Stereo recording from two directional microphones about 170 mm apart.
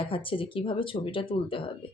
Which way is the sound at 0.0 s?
30° left (ahead or behind).